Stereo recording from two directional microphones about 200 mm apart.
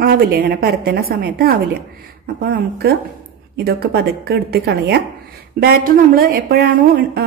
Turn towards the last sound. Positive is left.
turn(degrees=-50)  # may be behind; listen again after turning